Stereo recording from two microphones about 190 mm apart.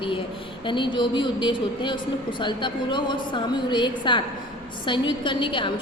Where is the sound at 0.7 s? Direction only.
25° left (ahead or behind).